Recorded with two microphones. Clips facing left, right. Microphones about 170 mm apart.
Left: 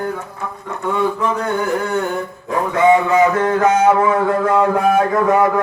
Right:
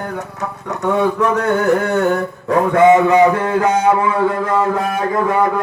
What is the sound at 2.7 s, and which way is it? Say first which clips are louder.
Speech: right 2 dB; 40° right (ahead or behind).